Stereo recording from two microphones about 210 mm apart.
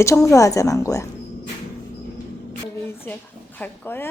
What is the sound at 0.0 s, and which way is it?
Speech, 15° left (ahead or behind).